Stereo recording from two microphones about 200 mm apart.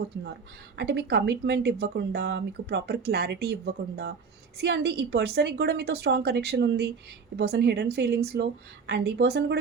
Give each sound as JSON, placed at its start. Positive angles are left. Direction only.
{"t": 0.8, "sound": "speech", "side_deg": -55}